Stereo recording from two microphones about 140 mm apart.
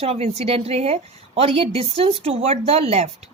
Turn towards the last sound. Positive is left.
turn(degrees=-45)  # may be behind; listen again after turning